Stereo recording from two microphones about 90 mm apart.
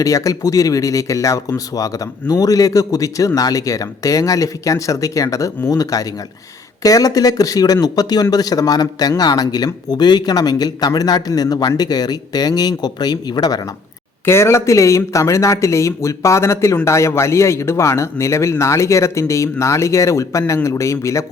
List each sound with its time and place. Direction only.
0.0 s speech: 40° left (ahead or behind)
14.3 s speech: 30° left (ahead or behind)